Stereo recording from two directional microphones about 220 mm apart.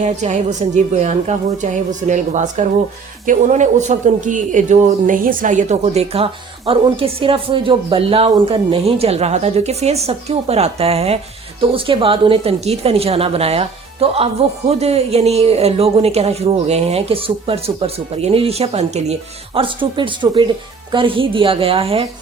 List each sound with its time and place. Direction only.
0.0 s a woman's voice: 30° right (ahead or behind)